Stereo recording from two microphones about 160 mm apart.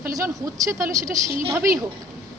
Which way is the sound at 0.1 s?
20° right (ahead or behind).